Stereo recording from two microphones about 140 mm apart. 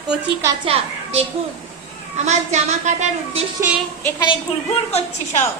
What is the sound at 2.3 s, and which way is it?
A woman's voice, 55° right (ahead or behind).